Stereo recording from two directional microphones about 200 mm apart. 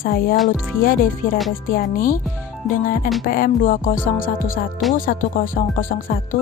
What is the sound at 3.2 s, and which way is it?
Speech, 45° left (ahead or behind).